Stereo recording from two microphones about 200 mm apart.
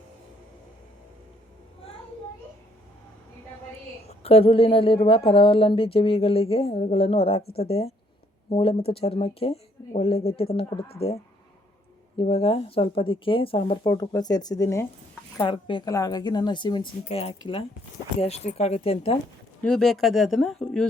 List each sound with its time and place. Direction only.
4.2 s speech: 30° left (ahead or behind)
19.6 s speech: centre (ahead or behind)